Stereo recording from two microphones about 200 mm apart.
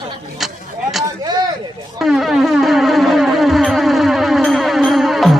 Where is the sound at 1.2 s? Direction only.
20° right (ahead or behind).